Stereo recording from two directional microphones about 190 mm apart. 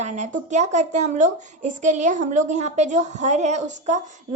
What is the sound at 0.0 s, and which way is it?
Speech, 40° right (ahead or behind).